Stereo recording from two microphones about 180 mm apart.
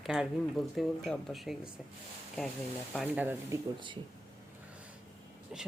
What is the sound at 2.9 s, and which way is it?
Speech, 5° right (ahead or behind).